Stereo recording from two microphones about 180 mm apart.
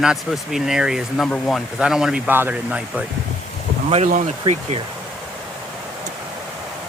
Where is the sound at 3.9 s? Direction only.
40° right (ahead or behind).